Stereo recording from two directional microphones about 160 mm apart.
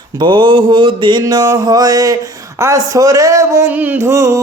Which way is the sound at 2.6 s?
20° right (ahead or behind).